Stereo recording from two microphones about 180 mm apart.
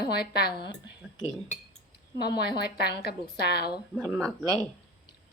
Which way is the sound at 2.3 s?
60° left (ahead or behind).